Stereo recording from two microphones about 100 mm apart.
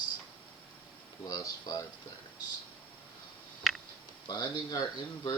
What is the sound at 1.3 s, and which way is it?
Speech, 40° left (ahead or behind).